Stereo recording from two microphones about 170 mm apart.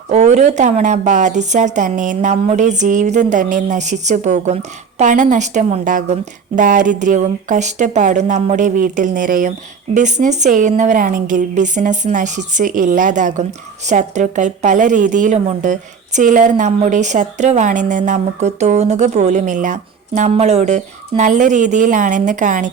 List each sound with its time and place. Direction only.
0.1 s speech: 45° right (ahead or behind)